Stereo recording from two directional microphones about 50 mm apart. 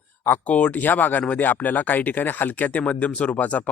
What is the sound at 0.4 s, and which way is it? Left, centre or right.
Speech, left.